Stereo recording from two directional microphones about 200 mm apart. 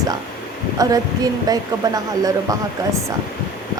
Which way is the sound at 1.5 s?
20° right (ahead or behind).